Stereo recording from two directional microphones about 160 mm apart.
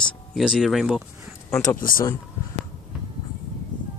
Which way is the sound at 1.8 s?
60° left (ahead or behind).